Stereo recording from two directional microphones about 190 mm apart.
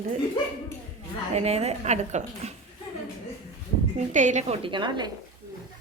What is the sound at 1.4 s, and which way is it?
A woman's voice, 35° right (ahead or behind).